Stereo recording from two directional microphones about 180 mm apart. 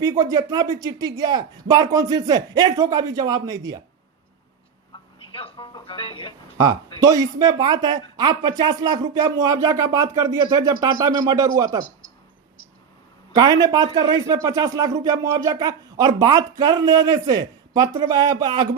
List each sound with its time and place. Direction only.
0.0 s speech: 20° right (ahead or behind)
5.2 s a sound: 30° left (ahead or behind)
7.0 s speech: 20° right (ahead or behind)
13.3 s speech: 20° right (ahead or behind)